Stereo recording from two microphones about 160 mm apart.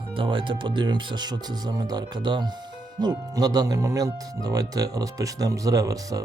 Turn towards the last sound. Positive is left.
turn(degrees=-20)  # may be behind; listen again after turning